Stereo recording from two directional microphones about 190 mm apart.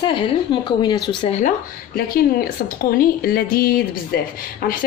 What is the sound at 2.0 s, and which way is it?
A woman's voice, 50° left (ahead or behind).